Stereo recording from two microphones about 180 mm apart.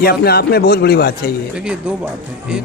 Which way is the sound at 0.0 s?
60° left (ahead or behind).